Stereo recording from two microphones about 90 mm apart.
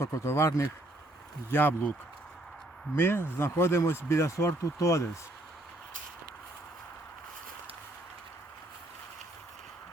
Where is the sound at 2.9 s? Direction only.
25° left (ahead or behind).